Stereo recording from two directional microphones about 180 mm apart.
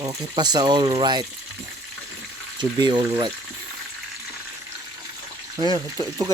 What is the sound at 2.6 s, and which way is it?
Speech, 25° right (ahead or behind).